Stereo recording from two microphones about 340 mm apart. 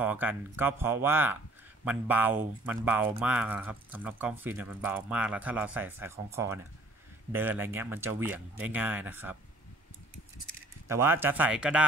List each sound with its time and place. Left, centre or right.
0.0 s speech: centre
10.9 s speech: centre